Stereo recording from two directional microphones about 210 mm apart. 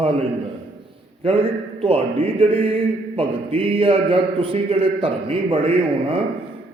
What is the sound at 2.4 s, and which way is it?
A man's voice, 25° right (ahead or behind).